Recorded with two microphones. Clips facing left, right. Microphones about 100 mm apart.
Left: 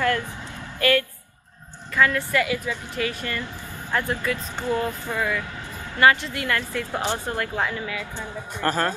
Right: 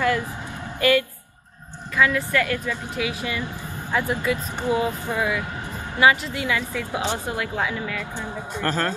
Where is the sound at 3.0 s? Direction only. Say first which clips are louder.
Even; 10° right (ahead or behind).